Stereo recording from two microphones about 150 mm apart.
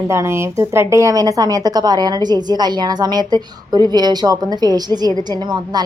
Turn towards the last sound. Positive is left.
turn(degrees=-30)  # may be behind; listen again after turning